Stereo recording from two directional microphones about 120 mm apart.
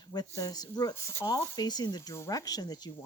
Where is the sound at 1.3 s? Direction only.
35° left (ahead or behind).